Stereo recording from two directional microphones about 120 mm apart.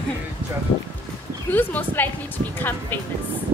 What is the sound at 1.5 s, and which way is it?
Speech, 15° left (ahead or behind).